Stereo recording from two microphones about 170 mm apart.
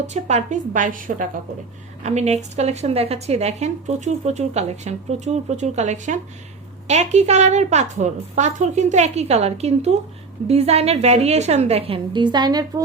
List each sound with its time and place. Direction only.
0.1 s a woman's voice: 40° right (ahead or behind)
2.0 s speech: 40° right (ahead or behind); by 12.8 s 25° right (ahead or behind)